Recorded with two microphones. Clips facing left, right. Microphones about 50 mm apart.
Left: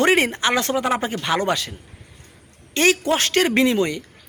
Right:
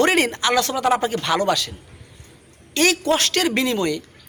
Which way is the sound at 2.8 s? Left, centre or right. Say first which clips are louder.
Even; left.